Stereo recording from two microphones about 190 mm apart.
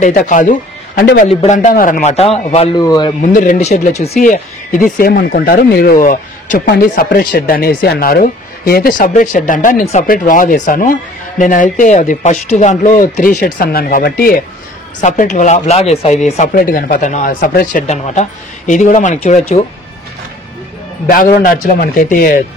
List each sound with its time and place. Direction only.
0.0 s speech: 40° left (ahead or behind)
2.8 s a man's voice: 20° left (ahead or behind)
3.2 s speech: 40° left (ahead or behind)
6.6 s speech: 55° left (ahead or behind)
15.0 s speech: 40° left (ahead or behind)
17.8 s speech: 35° left (ahead or behind)
21.1 s speech: 50° left (ahead or behind)